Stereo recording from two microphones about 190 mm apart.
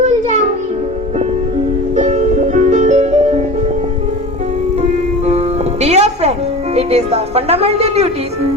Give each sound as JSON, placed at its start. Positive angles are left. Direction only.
{"t": 2.0, "sound": "music", "side_deg": -40}
{"t": 5.8, "sound": "music", "side_deg": -35}
{"t": 6.7, "sound": "a woman's voice", "side_deg": -35}